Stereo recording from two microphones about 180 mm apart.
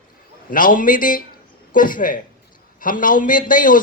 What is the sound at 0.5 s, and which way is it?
A man's voice, 50° left (ahead or behind).